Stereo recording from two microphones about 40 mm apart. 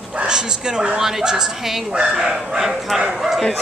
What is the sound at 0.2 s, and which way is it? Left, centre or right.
Speech, right.